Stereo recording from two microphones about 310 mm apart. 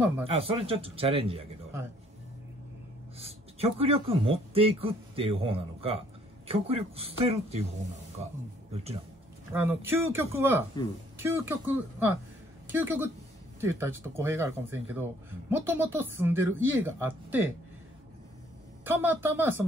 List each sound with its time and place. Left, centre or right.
0.2 s speech: centre
3.2 s speech: centre
9.5 s a woman's voice: centre
18.9 s speech: centre